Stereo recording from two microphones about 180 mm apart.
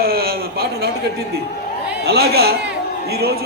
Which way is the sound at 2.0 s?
65° right (ahead or behind).